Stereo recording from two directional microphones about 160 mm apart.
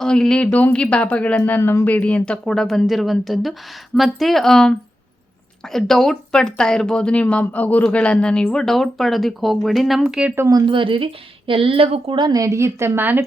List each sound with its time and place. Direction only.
0.0 s speech: 5° left (ahead or behind)
10.4 s a woman's voice: 25° right (ahead or behind)